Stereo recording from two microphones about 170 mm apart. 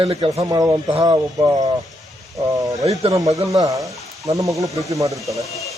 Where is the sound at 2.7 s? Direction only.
20° right (ahead or behind).